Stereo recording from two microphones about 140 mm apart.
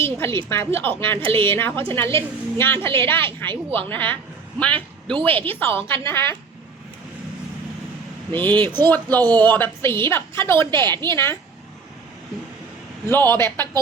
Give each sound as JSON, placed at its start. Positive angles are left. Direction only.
{"t": 0.0, "sound": "a sound", "side_deg": 20}
{"t": 0.4, "sound": "a woman's voice", "side_deg": 20}
{"t": 1.2, "sound": "a woman's voice", "side_deg": -40}
{"t": 1.5, "sound": "a woman's voice", "side_deg": 15}
{"t": 8.3, "sound": "a woman's voice", "side_deg": 10}
{"t": 13.1, "sound": "a woman's voice", "side_deg": 15}